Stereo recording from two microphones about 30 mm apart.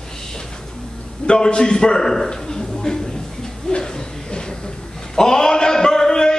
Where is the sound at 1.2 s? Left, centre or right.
Left.